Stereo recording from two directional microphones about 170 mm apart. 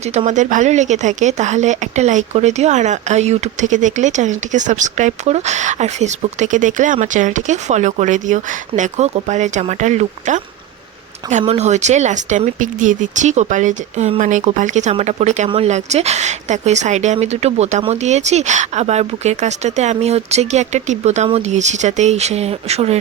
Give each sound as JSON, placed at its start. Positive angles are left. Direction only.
{"t": 0.0, "sound": "a woman's voice", "side_deg": -40}